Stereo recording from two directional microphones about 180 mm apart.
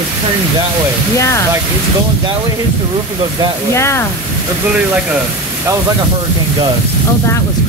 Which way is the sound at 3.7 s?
15° left (ahead or behind).